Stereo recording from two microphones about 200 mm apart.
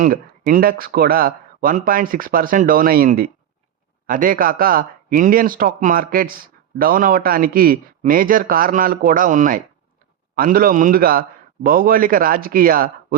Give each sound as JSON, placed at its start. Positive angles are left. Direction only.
{"t": 0.0, "sound": "speech", "side_deg": -45}